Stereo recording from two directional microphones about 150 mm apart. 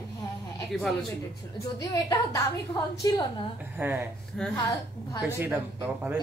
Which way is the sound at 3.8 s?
15° right (ahead or behind).